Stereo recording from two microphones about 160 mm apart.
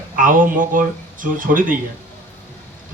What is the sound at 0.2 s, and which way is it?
Speech, 55° right (ahead or behind).